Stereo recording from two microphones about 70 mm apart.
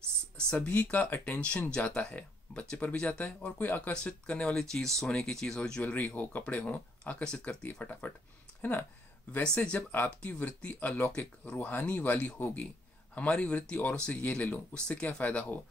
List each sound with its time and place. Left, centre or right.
0.7 s speech: centre
3.9 s speech: centre
5.6 s speech: centre
9.6 s speech: left